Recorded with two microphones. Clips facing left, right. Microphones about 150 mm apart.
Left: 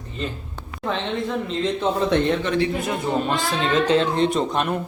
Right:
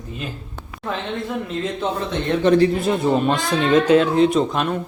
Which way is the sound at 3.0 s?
20° right (ahead or behind).